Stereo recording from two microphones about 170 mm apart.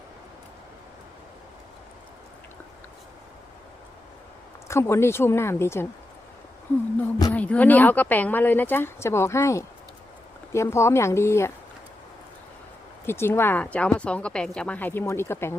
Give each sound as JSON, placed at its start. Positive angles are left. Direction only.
{"t": 4.7, "sound": "speech", "side_deg": 15}
{"t": 7.3, "sound": "speech", "side_deg": 10}
{"t": 13.1, "sound": "speech", "side_deg": 15}